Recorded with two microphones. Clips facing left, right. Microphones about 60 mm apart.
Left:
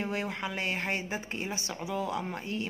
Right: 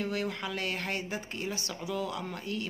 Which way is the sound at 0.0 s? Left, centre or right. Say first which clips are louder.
Even; left.